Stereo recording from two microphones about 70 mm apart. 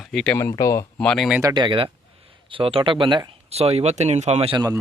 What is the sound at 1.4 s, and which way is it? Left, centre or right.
Speech, right.